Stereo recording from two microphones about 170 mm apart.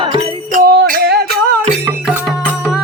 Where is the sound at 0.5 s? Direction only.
55° right (ahead or behind).